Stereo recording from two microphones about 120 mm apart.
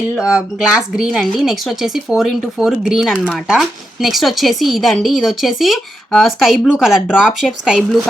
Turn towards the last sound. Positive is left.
turn(degrees=-5)  # may be behind; listen again after turning